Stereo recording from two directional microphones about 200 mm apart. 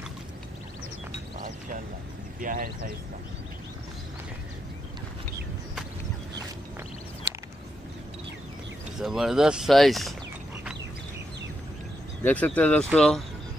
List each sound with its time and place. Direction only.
2.4 s speech: 45° right (ahead or behind)
7.3 s a sound: 60° right (ahead or behind)
8.9 s speech: centre (ahead or behind)
12.2 s speech: 5° left (ahead or behind)